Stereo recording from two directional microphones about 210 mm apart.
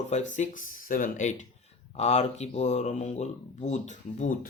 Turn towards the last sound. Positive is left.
turn(degrees=35)  # may be behind; listen again after turning